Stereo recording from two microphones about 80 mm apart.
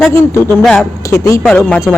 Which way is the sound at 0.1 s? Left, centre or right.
Left.